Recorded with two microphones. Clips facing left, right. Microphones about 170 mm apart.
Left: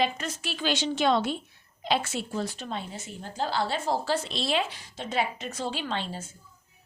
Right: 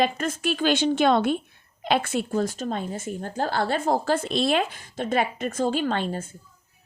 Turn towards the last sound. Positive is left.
turn(degrees=-50)  # may be behind; listen again after turning